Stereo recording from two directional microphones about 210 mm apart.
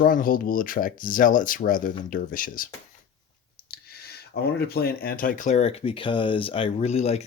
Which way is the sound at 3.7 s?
50° left (ahead or behind).